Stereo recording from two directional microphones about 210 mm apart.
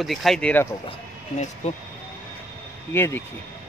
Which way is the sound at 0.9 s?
30° left (ahead or behind).